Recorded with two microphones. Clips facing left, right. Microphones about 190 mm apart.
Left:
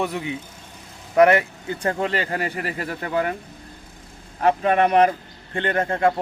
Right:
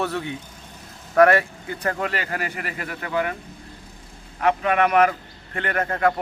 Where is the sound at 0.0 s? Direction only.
15° left (ahead or behind); by 3.3 s 30° left (ahead or behind).